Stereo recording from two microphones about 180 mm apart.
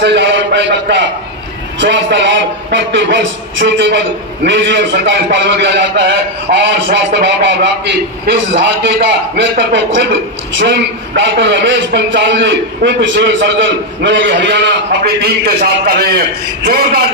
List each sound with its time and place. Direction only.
0.0 s a sound: 80° right
1.8 s a man's voice: 80° right
16.6 s a man's voice: 60° right (ahead or behind)